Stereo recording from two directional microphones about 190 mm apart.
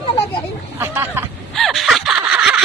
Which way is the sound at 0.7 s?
10° right (ahead or behind).